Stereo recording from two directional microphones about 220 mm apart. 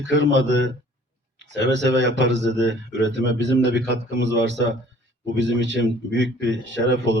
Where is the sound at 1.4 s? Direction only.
55° right (ahead or behind).